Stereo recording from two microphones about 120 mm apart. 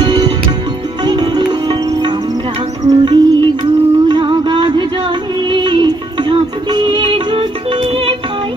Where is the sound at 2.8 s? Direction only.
35° right (ahead or behind).